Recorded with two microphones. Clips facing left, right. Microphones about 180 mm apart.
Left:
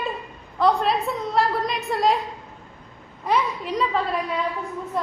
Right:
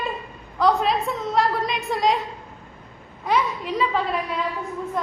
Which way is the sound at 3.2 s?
Centre (ahead or behind).